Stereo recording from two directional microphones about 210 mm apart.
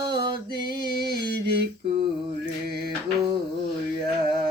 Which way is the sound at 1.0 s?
50° right (ahead or behind).